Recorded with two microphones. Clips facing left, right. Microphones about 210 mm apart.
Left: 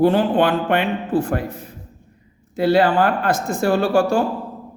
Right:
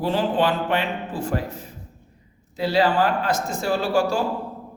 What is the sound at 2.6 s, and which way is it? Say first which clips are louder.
Speech: left 4 dB; 55° left (ahead or behind).